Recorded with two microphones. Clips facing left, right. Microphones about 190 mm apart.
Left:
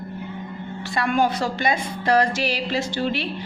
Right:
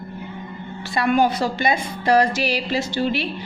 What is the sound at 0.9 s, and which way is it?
A woman's voice, 10° right (ahead or behind).